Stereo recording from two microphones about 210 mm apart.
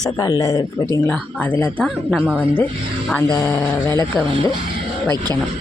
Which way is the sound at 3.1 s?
10° left (ahead or behind).